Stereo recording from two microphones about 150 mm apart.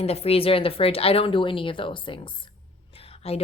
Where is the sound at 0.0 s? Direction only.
45° left (ahead or behind).